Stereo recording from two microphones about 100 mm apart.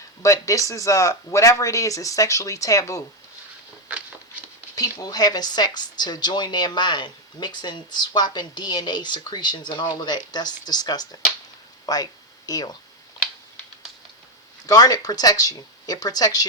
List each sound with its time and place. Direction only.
0.2 s speech: 35° left (ahead or behind)
3.8 s a sound: 15° right (ahead or behind)
4.7 s speech: 35° left (ahead or behind)
14.7 s speech: 40° left (ahead or behind)